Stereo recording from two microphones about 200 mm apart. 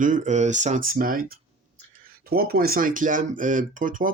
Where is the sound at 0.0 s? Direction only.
40° right (ahead or behind).